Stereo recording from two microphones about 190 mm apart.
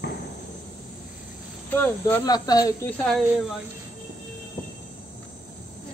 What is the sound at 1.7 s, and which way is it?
Speech, 10° left (ahead or behind).